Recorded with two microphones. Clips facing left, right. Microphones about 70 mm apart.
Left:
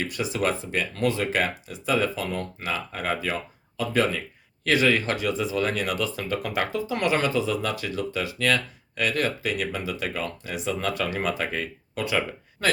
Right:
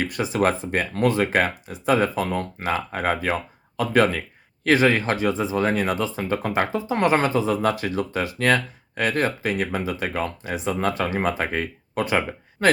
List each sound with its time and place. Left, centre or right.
0.0 s speech: right
4.6 s speech: right